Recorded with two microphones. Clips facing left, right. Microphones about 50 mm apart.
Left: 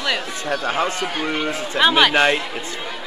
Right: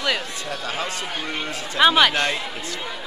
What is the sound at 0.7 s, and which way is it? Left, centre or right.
Speech, left.